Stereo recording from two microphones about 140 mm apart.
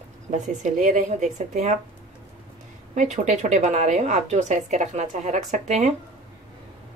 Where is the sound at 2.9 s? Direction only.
60° right (ahead or behind).